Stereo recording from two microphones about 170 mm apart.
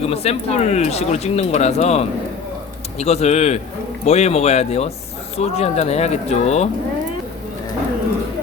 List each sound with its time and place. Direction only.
0.0 s speech: 35° left (ahead or behind)